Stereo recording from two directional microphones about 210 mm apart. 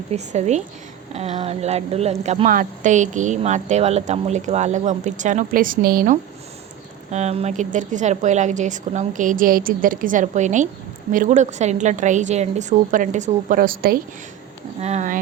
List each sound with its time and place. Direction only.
0.1 s speech: 35° right (ahead or behind)
7.1 s speech: 30° right (ahead or behind)
14.8 s speech: 30° right (ahead or behind)